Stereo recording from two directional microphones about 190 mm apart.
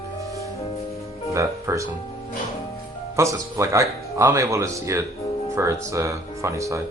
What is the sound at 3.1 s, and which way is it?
Speech, 15° right (ahead or behind).